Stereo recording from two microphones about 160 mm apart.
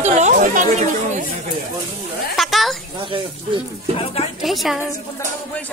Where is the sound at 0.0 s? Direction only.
50° right (ahead or behind).